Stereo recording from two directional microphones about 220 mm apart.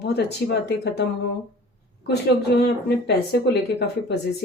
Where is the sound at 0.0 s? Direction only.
50° left (ahead or behind).